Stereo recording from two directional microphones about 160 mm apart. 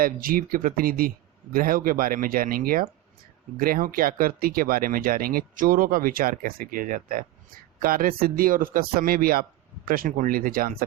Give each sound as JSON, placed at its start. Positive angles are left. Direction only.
{"t": 0.0, "sound": "speech", "side_deg": -60}